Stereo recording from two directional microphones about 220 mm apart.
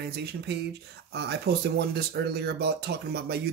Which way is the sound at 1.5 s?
45° right (ahead or behind).